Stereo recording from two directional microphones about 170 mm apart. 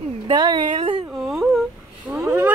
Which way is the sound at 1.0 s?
Centre (ahead or behind).